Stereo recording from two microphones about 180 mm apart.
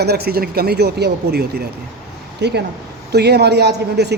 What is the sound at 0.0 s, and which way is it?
A woman's voice, 65° right (ahead or behind).